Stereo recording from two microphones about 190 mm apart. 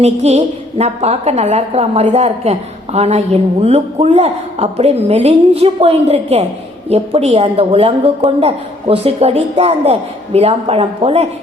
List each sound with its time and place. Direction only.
0.0 s a woman's voice: 35° right (ahead or behind)